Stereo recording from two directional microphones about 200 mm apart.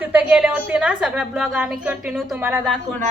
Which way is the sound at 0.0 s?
5° right (ahead or behind).